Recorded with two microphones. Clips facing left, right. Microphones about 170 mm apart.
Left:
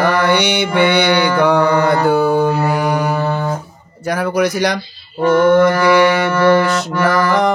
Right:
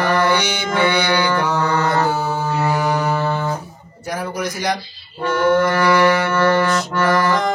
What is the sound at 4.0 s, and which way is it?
Mantra, 75° left (ahead or behind).